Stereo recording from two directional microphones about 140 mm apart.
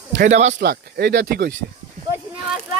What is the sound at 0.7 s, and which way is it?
Speech, 90° right.